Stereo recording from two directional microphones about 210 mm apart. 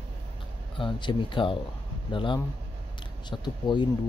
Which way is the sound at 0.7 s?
20° left (ahead or behind).